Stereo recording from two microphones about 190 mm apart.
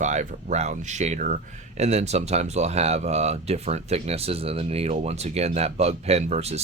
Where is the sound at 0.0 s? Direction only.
40° right (ahead or behind).